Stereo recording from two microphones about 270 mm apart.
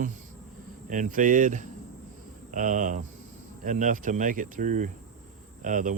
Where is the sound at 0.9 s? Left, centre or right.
Right.